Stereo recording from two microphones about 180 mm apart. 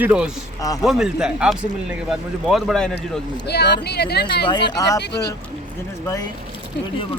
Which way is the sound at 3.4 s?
65° left (ahead or behind).